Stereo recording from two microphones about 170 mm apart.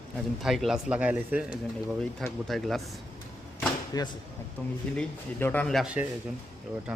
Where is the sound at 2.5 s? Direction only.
Centre (ahead or behind).